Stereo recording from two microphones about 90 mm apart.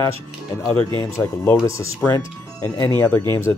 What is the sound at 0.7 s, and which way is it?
Speech, 65° right (ahead or behind).